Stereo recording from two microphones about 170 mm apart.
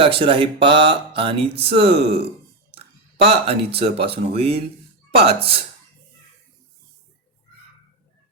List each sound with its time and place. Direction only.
0.0 s speech: 30° right (ahead or behind)
3.2 s speech: 35° right (ahead or behind)